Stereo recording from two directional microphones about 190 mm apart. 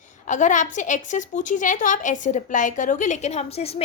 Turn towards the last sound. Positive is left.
turn(degrees=30)  # may be behind; listen again after turning